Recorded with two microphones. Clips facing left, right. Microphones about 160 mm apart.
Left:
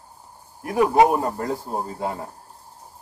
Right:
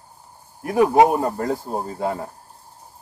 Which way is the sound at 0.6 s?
40° right (ahead or behind).